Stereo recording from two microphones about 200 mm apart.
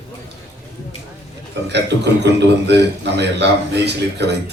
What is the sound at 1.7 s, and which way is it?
A man's voice, 60° right (ahead or behind).